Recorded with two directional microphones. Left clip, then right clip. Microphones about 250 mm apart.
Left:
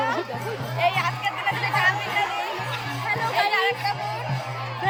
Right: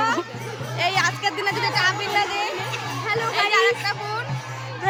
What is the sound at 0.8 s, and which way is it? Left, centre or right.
Music, centre.